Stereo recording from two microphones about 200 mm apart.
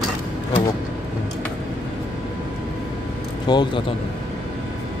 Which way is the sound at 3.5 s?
20° left (ahead or behind).